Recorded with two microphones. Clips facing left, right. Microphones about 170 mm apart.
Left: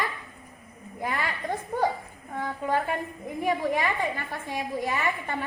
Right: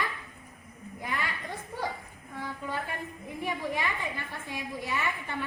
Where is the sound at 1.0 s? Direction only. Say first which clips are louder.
Left 5 dB; 50° left (ahead or behind).